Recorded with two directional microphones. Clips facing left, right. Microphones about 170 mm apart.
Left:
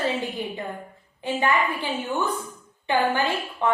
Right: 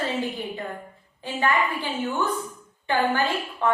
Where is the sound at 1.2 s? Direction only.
15° left (ahead or behind).